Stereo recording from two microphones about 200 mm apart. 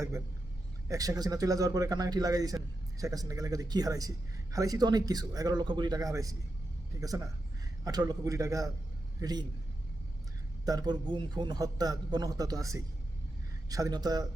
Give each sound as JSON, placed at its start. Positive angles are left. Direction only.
{"t": 0.9, "sound": "a man's voice", "side_deg": -20}
{"t": 7.9, "sound": "a man's voice", "side_deg": -20}
{"t": 10.7, "sound": "a man's voice", "side_deg": -20}